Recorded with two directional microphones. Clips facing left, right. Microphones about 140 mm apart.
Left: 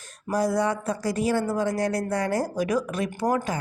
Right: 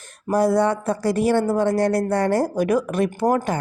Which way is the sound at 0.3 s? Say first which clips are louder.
Right 6 dB; 60° right (ahead or behind).